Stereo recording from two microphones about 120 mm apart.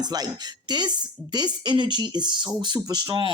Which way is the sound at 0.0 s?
35° right (ahead or behind).